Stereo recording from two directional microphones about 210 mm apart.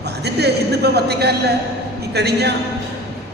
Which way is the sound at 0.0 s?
50° right (ahead or behind).